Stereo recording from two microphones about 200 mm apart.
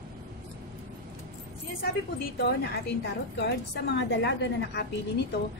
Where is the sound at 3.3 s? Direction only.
60° left (ahead or behind).